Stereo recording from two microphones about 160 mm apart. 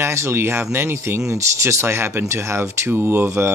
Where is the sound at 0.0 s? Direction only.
15° right (ahead or behind).